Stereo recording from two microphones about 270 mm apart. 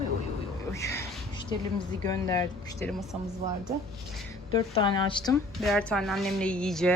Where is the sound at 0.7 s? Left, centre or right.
Centre.